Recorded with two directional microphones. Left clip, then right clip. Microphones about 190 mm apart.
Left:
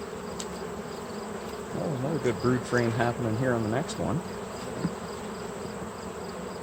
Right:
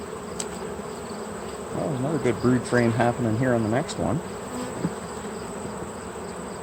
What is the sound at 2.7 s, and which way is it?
Speech, 25° right (ahead or behind).